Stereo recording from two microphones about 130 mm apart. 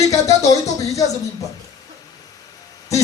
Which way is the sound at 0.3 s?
25° left (ahead or behind).